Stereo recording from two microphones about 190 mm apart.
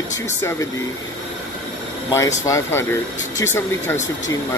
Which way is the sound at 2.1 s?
15° left (ahead or behind).